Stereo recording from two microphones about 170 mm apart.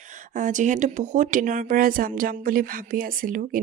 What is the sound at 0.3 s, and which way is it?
Speech, 50° right (ahead or behind).